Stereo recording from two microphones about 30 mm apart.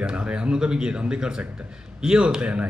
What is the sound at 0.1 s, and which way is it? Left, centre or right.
Speech, right.